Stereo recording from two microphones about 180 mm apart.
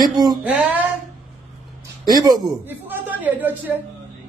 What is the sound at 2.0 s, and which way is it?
Speech, 20° right (ahead or behind).